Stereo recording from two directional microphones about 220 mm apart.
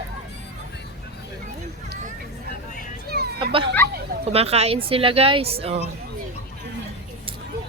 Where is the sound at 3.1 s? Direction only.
50° right (ahead or behind).